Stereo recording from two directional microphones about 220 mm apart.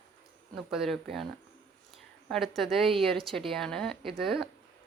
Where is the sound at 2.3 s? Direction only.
Centre (ahead or behind).